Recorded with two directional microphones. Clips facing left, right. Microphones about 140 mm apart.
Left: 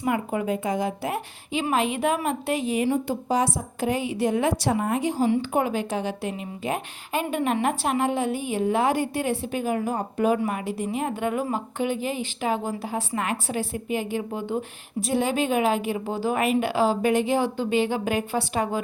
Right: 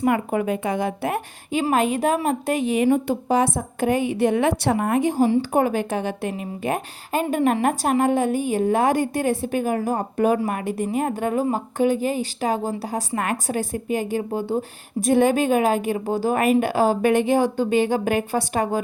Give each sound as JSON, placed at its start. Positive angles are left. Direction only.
{"t": 0.0, "sound": "a woman's voice", "side_deg": -60}
{"t": 1.7, "sound": "a woman's voice", "side_deg": -45}
{"t": 2.6, "sound": "a woman's voice", "side_deg": -65}
{"t": 15.0, "sound": "speech", "side_deg": -50}